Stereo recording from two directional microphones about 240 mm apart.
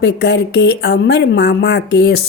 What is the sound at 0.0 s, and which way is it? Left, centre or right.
A woman's voice, left.